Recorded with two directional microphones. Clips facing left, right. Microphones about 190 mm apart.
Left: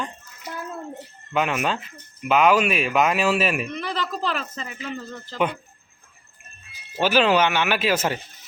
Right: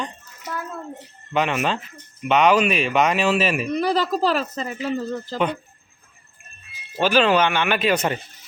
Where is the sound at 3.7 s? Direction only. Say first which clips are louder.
Right 8 dB; 40° right (ahead or behind).